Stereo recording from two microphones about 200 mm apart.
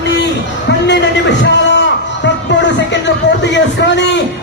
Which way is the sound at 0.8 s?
60° left (ahead or behind).